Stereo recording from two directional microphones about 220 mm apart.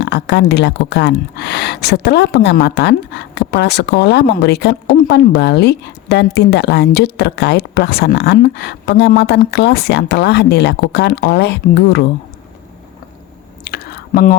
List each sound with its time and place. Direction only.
0.0 s speech: 50° left (ahead or behind)
13.7 s chewing: 45° left (ahead or behind)